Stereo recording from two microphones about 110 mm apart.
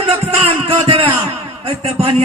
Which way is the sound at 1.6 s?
65° right (ahead or behind).